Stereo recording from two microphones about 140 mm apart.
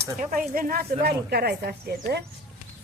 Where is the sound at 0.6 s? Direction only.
90° right.